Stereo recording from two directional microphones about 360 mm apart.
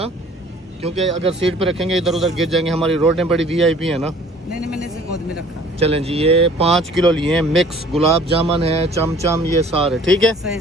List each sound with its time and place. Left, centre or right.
0.8 s speech: centre
1.6 s speech: centre
5.8 s speech: centre
6.7 s speech: centre
8.3 s speech: centre
9.9 s speech: centre